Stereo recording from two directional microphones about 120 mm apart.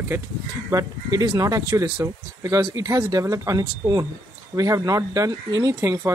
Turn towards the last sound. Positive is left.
turn(degrees=-25)  # may be behind; listen again after turning